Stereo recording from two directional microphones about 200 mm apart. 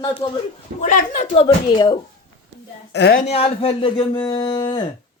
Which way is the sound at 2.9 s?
55° left (ahead or behind).